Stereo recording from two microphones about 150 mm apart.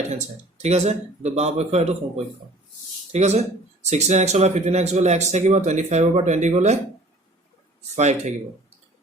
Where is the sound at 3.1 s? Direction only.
45° right (ahead or behind).